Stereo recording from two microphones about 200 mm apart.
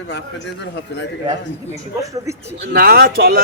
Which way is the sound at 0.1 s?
60° left (ahead or behind).